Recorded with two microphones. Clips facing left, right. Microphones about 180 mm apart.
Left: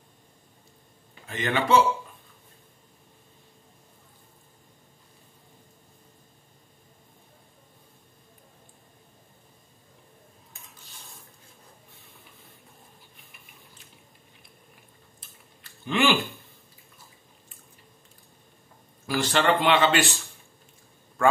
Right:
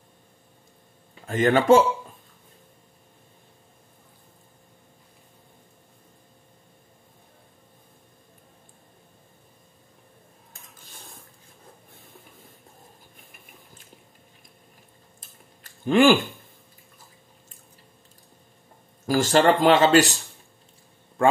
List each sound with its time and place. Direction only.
1.2 s speech: 45° right (ahead or behind)
10.8 s cutlery: 50° right (ahead or behind)
11.9 s a sound: 50° right (ahead or behind)
13.2 s ratchet: 50° right (ahead or behind)
15.6 s a sound: 45° right (ahead or behind)
19.0 s speech: 45° right (ahead or behind)